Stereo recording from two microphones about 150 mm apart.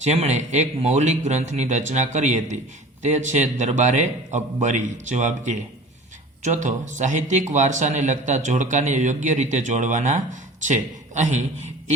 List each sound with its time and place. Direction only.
0.0 s a man's voice: 45° right (ahead or behind)